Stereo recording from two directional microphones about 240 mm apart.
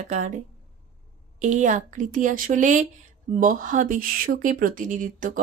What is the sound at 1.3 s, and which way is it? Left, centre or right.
Speech, right.